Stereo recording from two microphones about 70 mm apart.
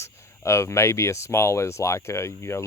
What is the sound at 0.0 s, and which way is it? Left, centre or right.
Speech, left.